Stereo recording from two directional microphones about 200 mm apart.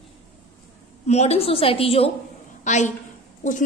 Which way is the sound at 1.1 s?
30° left (ahead or behind).